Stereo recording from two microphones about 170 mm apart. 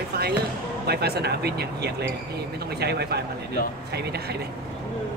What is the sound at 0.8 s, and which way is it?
Speech, 70° right (ahead or behind).